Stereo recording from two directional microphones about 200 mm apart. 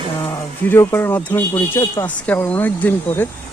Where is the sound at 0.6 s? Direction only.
10° left (ahead or behind).